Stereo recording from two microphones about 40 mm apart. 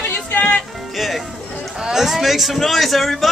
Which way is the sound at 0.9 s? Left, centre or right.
Centre.